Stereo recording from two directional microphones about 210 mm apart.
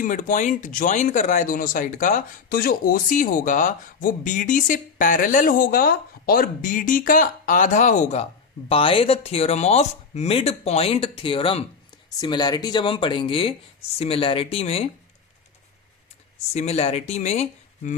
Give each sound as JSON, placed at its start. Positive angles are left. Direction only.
{"t": 0.0, "sound": "speech", "side_deg": 40}
{"t": 16.6, "sound": "speech", "side_deg": 30}